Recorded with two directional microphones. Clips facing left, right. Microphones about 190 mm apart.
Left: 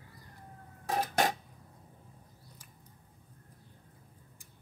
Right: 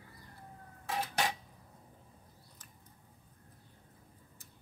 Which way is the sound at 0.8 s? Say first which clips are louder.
Left 5 dB; 40° left (ahead or behind).